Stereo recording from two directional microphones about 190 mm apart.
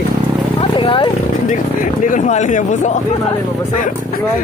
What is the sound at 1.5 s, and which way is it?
Speech, 40° left (ahead or behind).